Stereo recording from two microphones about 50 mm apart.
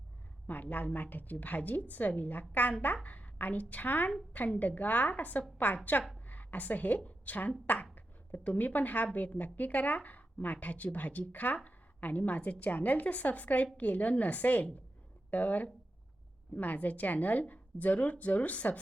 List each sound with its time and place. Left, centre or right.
0.4 s a woman's voice: left